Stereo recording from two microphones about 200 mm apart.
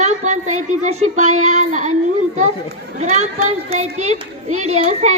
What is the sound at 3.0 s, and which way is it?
A child's voice, 35° right (ahead or behind).